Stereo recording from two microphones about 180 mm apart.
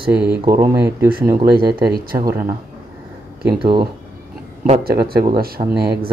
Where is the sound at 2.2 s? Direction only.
20° right (ahead or behind).